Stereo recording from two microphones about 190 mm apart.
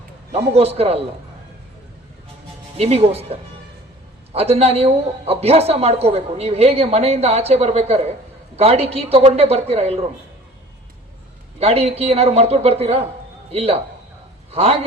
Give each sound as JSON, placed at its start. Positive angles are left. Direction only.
{"t": 0.3, "sound": "a man's voice", "side_deg": -35}
{"t": 2.7, "sound": "a man's voice", "side_deg": -30}
{"t": 11.6, "sound": "a man's voice", "side_deg": -30}